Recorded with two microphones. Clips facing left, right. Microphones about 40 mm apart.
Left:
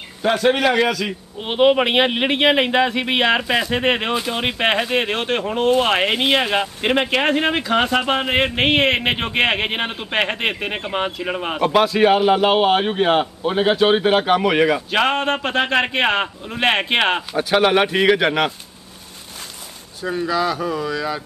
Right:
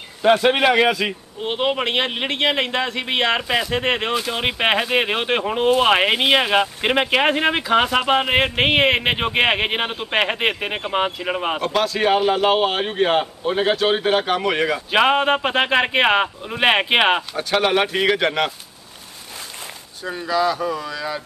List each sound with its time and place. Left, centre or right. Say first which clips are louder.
0.3 s a man's voice: right 1 dB; right
1.4 s speech: left 6 dB; centre
11.6 s speech: left 7 dB; centre
14.9 s speech: right 2 dB; centre
17.3 s speech: left 3 dB; centre
20.0 s speech: left 1 dB; centre